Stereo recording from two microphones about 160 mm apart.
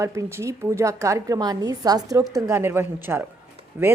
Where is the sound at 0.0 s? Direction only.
20° right (ahead or behind).